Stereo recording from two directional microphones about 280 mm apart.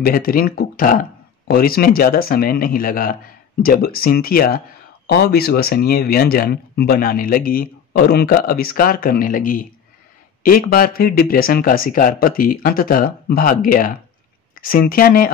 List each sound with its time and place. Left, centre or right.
0.0 s speech: left